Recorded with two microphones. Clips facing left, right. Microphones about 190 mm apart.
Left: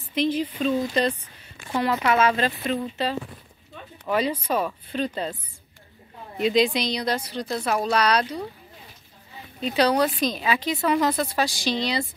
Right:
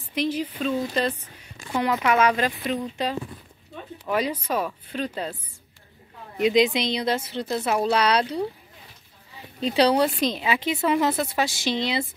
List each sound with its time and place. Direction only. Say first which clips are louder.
0.1 s speech: left 2 dB; 10° right (ahead or behind)
1.8 s speech: even; 15° right (ahead or behind)
6.4 s speech: right 1 dB; 20° right (ahead or behind)
9.7 s speech: right 1 dB; 30° right (ahead or behind)